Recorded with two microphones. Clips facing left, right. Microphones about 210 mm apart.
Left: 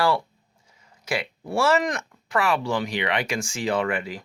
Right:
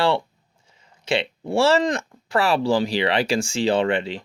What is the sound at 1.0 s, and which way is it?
Speech, 25° right (ahead or behind).